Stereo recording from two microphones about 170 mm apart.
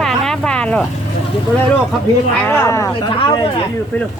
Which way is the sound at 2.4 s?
15° left (ahead or behind).